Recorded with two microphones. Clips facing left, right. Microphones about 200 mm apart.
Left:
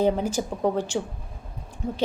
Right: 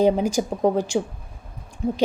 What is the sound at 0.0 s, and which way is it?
A woman's voice, 15° right (ahead or behind).